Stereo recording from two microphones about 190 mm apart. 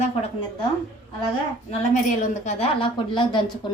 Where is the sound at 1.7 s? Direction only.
45° left (ahead or behind).